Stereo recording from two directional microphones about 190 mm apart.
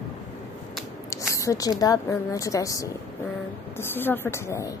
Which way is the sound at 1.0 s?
15° left (ahead or behind).